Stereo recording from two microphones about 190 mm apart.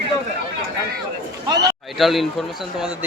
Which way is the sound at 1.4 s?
20° right (ahead or behind).